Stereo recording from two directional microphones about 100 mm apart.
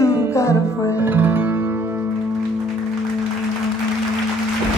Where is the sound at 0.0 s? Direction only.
30° left (ahead or behind).